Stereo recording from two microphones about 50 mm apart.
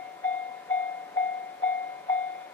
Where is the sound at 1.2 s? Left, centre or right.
Left.